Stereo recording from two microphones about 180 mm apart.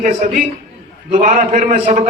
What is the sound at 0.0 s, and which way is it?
A man's voice, 45° right (ahead or behind).